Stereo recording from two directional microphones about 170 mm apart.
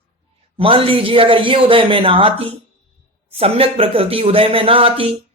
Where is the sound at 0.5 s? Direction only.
35° right (ahead or behind).